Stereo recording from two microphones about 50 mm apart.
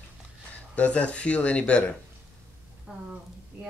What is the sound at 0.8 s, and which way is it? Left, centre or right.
Speech, left.